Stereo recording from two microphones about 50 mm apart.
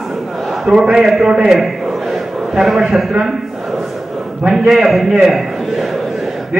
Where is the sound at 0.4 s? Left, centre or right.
Centre.